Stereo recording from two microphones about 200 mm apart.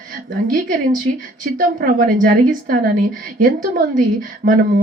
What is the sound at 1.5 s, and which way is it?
A woman's voice, 45° right (ahead or behind).